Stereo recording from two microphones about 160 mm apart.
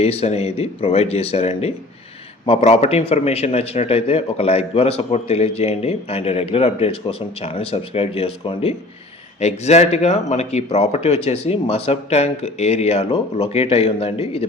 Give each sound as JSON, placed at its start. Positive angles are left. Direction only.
{"t": 0.0, "sound": "a man's voice", "side_deg": 40}